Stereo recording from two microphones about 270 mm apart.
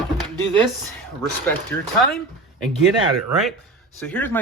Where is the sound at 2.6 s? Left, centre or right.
Centre.